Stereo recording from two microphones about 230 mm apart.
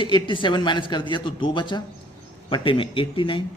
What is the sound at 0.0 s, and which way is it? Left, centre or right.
Speech, left.